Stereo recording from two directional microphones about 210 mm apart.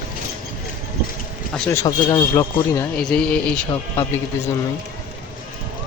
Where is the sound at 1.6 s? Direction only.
10° left (ahead or behind).